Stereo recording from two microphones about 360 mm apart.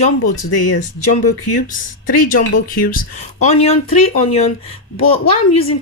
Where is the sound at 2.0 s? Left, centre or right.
Left.